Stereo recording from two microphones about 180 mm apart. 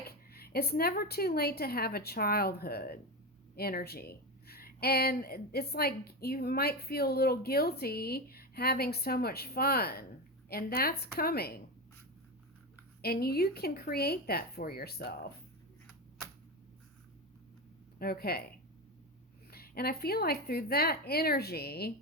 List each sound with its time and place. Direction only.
0.3 s speech: 60° left (ahead or behind)
13.0 s speech: 60° left (ahead or behind)
18.0 s speech: 60° left (ahead or behind)
19.5 s speech: 60° left (ahead or behind)